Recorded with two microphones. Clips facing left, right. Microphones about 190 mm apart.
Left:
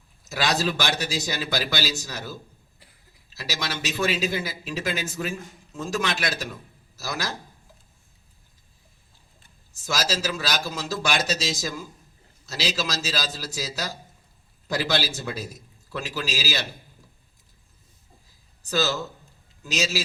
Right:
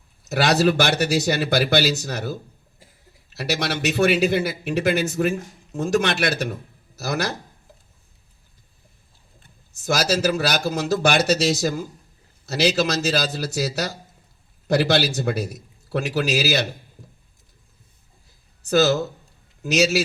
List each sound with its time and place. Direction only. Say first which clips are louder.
0.3 s speech: right 7 dB; 65° right (ahead or behind)
2.3 s a sound: right 7 dB; 45° right (ahead or behind)
3.3 s speech: right 7 dB; 65° right (ahead or behind)
9.8 s speech: right 7 dB; 60° right (ahead or behind)
19.6 s speech: right 8 dB; 70° right (ahead or behind)